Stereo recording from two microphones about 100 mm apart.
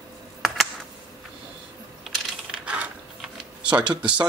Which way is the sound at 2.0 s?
Centre (ahead or behind).